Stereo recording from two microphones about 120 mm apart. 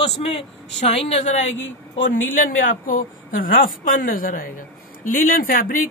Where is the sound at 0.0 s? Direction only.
50° left (ahead or behind).